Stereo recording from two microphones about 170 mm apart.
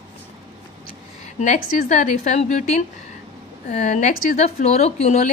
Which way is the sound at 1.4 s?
45° left (ahead or behind).